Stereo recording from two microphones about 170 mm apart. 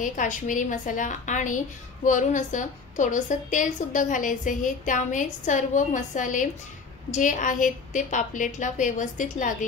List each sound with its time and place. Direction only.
0.0 s a woman's voice: 50° left (ahead or behind)